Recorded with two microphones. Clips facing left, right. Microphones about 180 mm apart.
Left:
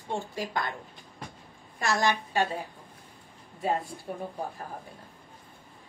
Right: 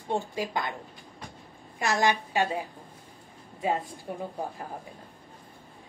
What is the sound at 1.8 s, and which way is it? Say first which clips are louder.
Speech: right 1 dB; 15° right (ahead or behind).